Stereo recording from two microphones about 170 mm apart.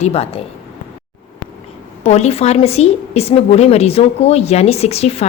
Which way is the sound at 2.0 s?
40° left (ahead or behind).